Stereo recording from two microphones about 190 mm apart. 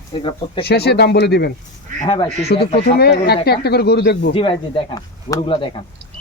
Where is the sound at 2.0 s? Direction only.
25° left (ahead or behind).